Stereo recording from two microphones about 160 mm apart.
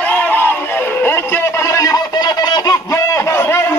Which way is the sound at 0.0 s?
10° left (ahead or behind).